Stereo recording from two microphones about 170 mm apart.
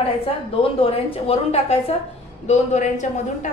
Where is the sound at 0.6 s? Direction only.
35° left (ahead or behind).